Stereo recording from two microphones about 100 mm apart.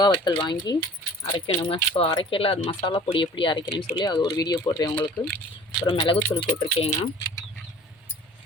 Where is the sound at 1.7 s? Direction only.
70° left (ahead or behind); by 4.2 s 50° left (ahead or behind).